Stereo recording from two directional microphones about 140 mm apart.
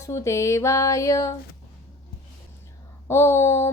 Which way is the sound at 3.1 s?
20° left (ahead or behind).